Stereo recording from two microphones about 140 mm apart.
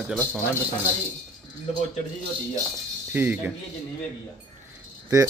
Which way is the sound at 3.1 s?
15° right (ahead or behind).